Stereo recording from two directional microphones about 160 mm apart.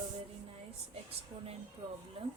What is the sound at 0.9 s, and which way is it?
A woman's voice, 40° right (ahead or behind).